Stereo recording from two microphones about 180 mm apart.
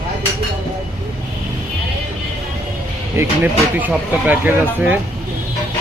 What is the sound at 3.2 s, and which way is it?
Speech, 15° right (ahead or behind).